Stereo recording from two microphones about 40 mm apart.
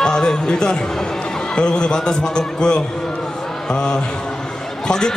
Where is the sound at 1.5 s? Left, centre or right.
Left.